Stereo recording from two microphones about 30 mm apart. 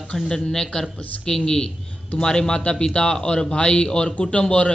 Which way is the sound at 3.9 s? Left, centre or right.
Left.